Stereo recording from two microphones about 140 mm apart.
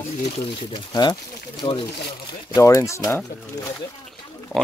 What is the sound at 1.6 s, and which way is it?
Speech, 30° left (ahead or behind).